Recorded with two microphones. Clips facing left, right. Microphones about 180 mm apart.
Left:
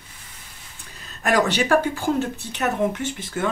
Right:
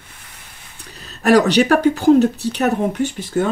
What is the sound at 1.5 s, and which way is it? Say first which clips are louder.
Speech: right 6 dB; 65° right (ahead or behind).